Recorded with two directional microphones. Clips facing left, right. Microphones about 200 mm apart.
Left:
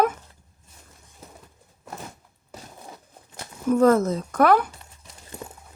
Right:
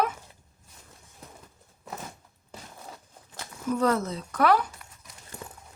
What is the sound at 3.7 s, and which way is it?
Speech, 50° left (ahead or behind).